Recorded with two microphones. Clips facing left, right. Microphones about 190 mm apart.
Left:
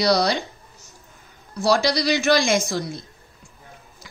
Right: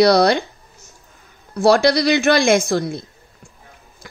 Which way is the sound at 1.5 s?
55° right (ahead or behind).